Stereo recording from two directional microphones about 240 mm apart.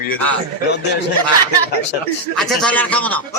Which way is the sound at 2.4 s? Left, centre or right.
Centre.